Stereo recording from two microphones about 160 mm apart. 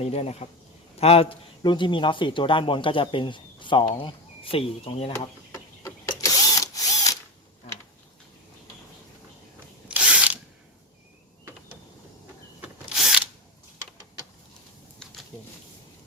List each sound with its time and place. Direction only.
0.0 s a man's voice: 40° left (ahead or behind)
6.3 s drill: 25° left (ahead or behind)
9.9 s ratchet: 10° right (ahead or behind)
12.9 s drill: 5° right (ahead or behind)